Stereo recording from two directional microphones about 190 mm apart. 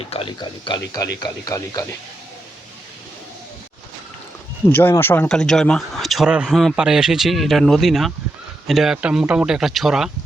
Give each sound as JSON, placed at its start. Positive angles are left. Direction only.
{"t": 0.0, "sound": "speech", "side_deg": 30}
{"t": 4.7, "sound": "speech", "side_deg": 10}